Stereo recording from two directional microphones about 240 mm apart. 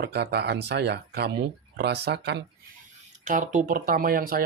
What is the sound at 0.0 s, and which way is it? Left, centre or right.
Speech, right.